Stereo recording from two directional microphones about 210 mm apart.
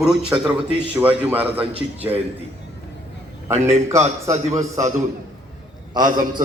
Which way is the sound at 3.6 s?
30° right (ahead or behind).